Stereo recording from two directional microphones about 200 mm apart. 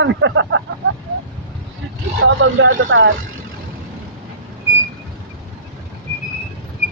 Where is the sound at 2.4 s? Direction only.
70° right (ahead or behind).